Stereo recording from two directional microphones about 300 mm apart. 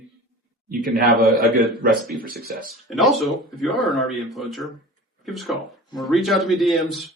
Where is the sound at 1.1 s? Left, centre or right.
Centre.